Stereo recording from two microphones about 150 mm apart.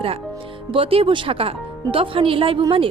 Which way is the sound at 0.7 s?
40° right (ahead or behind).